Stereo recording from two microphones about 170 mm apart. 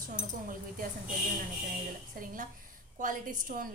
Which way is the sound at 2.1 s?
55° right (ahead or behind).